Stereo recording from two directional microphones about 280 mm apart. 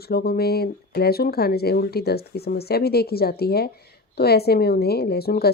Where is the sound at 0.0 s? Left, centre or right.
Left.